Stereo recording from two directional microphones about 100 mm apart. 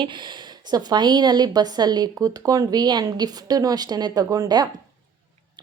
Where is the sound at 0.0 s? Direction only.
50° right (ahead or behind).